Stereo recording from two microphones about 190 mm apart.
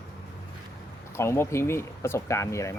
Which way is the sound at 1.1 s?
15° left (ahead or behind).